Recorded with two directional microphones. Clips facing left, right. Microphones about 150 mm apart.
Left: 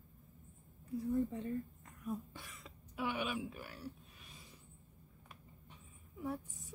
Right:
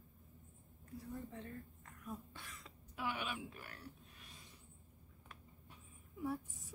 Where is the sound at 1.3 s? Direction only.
15° left (ahead or behind).